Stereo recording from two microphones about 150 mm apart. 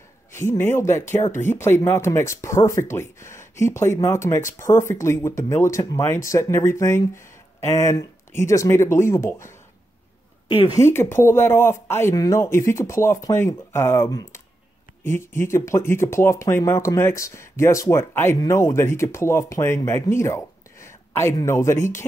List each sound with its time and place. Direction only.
0.5 s speech: 15° left (ahead or behind)
10.7 s speech: 15° left (ahead or behind)